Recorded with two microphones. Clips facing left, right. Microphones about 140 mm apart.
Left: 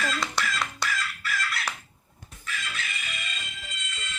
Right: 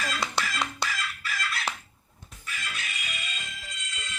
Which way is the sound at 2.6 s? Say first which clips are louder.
Left 1 dB; 10° right (ahead or behind).